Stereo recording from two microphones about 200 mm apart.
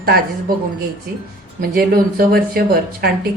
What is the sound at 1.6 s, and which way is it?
Speech, 45° right (ahead or behind).